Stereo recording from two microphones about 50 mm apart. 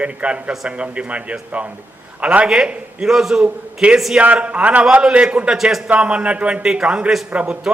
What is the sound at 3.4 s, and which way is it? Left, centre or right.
Speech, right.